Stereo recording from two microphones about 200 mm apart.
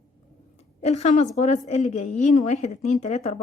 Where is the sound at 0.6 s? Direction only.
35° left (ahead or behind).